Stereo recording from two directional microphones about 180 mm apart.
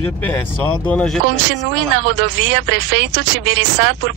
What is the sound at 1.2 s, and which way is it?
Speech, 75° right (ahead or behind).